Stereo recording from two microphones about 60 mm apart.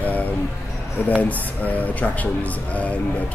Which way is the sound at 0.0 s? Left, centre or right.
Left.